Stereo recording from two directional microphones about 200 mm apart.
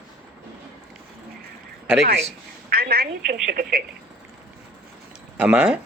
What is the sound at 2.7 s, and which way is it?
A woman's voice, 50° right (ahead or behind).